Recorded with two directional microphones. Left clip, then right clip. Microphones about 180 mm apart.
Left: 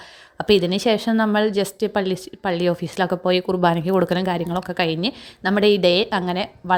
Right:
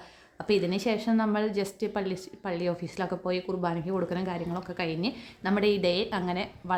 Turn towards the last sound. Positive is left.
turn(degrees=40)  # may be behind; listen again after turning